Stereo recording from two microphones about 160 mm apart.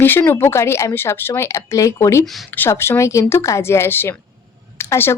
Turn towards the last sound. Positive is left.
turn(degrees=15)  # may be behind; listen again after turning